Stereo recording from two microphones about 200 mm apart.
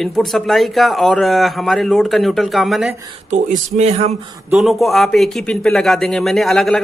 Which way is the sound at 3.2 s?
35° right (ahead or behind).